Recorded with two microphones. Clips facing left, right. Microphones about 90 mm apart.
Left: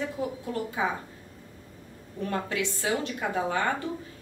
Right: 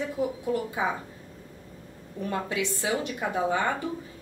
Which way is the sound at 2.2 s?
15° right (ahead or behind).